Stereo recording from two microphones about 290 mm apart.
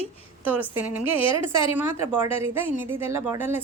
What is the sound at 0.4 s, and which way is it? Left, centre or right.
Speech, centre.